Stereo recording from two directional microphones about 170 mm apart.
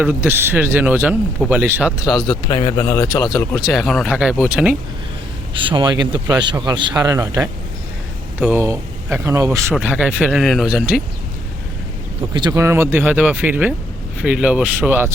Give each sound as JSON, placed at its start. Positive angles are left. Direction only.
{"t": 0.0, "sound": "speech", "side_deg": -10}
{"t": 2.3, "sound": "speech", "side_deg": 25}
{"t": 5.5, "sound": "speech", "side_deg": -30}
{"t": 9.7, "sound": "speech", "side_deg": -5}
{"t": 12.3, "sound": "speech", "side_deg": -25}